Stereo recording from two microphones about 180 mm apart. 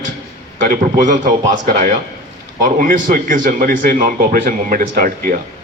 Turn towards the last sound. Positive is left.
turn(degrees=-55)  # may be behind; listen again after turning